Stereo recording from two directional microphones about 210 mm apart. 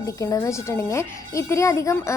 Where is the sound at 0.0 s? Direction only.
15° left (ahead or behind).